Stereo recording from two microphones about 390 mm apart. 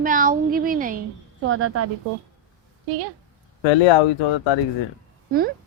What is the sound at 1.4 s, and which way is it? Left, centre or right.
Speech, right.